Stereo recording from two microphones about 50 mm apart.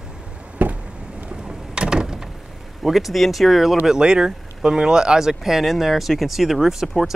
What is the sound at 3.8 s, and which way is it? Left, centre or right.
Speech, centre.